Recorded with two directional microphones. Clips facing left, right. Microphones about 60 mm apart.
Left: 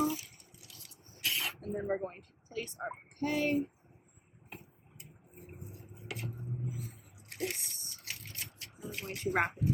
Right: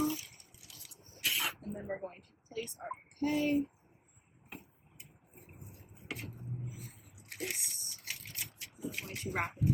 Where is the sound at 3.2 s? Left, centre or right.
Left.